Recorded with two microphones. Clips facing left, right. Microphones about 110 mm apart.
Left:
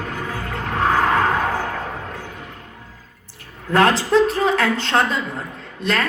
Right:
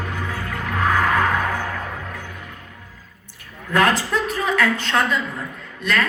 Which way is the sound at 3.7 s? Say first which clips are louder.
Left 4 dB; 35° left (ahead or behind).